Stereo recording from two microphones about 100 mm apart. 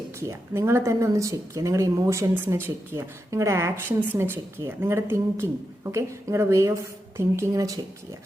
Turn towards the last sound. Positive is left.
turn(degrees=-35)  # may be behind; listen again after turning